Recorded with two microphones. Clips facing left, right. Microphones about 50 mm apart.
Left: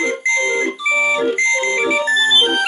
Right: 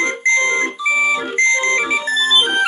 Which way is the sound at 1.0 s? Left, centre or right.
Centre.